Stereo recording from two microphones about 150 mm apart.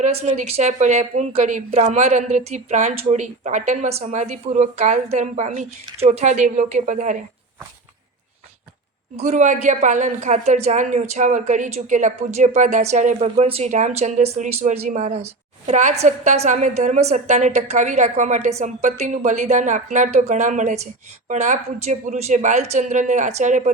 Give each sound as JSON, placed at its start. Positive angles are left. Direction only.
{"t": 0.0, "sound": "speech", "side_deg": -45}
{"t": 9.1, "sound": "speech", "side_deg": -50}
{"t": 13.2, "sound": "a woman's voice", "side_deg": -40}